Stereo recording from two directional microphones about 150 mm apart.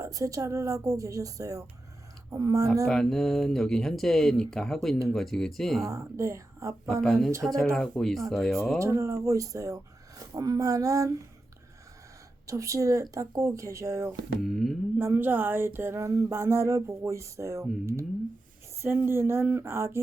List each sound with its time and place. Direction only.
0.0 s speech: 20° right (ahead or behind)
2.8 s speech: 5° left (ahead or behind)
5.8 s speech: 20° right (ahead or behind)
6.9 s speech: 5° left (ahead or behind)
8.8 s speech: 20° right (ahead or behind)
12.5 s speech: 20° right (ahead or behind)
14.4 s speech: centre (ahead or behind)
14.9 s a sound: 15° right (ahead or behind)